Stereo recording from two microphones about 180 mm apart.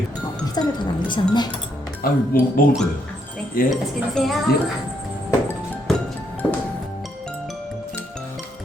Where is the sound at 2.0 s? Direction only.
55° left (ahead or behind).